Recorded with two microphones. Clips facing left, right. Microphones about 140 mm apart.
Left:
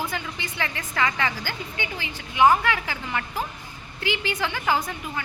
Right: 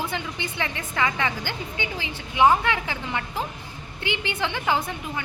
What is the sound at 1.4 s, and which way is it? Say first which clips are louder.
A woman's voice: right 1 dB; 20° right (ahead or behind).